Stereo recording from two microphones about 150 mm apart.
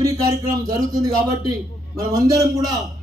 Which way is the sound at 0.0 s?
20° right (ahead or behind).